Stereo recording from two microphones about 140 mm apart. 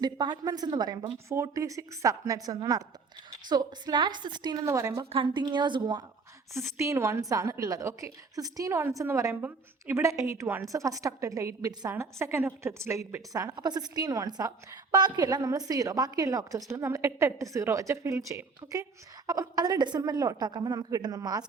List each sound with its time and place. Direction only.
0.0 s a woman's voice: 30° right (ahead or behind)
5.0 s a woman's voice: 35° right (ahead or behind)
6.5 s a woman's voice: 20° right (ahead or behind)